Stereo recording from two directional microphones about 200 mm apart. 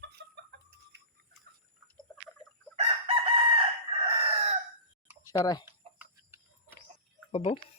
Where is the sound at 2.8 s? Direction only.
30° right (ahead or behind).